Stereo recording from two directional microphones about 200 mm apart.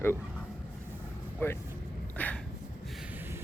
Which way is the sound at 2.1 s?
10° left (ahead or behind).